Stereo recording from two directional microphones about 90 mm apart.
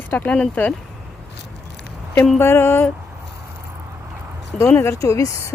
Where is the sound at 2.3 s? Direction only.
25° left (ahead or behind).